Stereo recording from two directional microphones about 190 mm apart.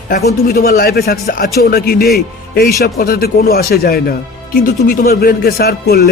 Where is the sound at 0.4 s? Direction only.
55° left (ahead or behind).